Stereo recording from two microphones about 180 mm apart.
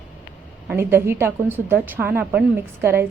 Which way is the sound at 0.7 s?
10° right (ahead or behind).